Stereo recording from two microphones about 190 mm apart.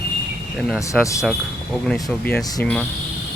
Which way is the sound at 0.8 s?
15° left (ahead or behind).